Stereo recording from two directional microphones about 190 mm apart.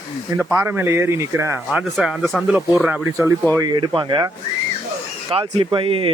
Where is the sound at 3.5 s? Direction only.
20° right (ahead or behind).